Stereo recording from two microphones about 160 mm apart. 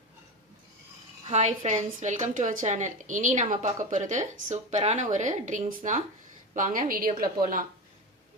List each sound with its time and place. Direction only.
1.3 s a woman's voice: 45° right (ahead or behind); by 7.6 s 60° right (ahead or behind)